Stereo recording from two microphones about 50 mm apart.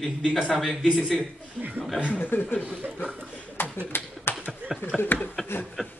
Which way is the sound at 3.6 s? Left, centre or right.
Left.